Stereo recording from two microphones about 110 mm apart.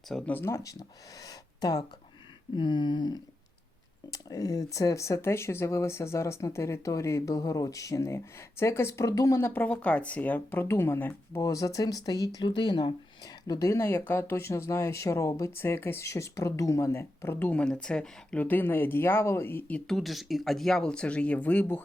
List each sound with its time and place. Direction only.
0.1 s speech: 5° left (ahead or behind)
0.3 s speech: 25° left (ahead or behind)
2.6 s a sound: 45° left (ahead or behind)
4.1 s speech: 35° left (ahead or behind)
9.5 s speech: 15° left (ahead or behind)
20.0 s speech: centre (ahead or behind)